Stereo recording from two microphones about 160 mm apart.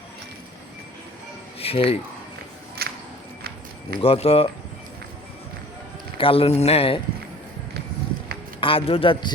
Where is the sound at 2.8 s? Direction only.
75° right (ahead or behind).